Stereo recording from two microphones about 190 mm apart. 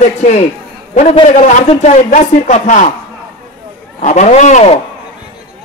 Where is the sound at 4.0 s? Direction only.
40° left (ahead or behind).